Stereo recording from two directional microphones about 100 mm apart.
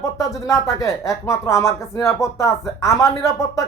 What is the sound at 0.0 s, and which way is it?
Speech, 35° left (ahead or behind).